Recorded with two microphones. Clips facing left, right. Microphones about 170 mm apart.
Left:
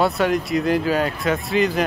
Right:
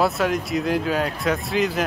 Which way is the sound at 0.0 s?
Centre (ahead or behind).